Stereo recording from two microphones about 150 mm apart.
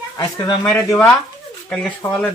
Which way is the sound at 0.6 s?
20° left (ahead or behind).